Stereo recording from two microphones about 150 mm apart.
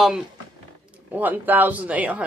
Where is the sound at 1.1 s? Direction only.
10° right (ahead or behind).